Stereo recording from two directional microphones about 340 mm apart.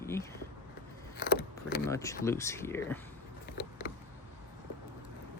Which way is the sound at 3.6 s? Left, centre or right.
Left.